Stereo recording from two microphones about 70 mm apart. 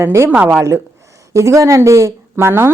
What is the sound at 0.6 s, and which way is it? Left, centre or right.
A woman's voice, right.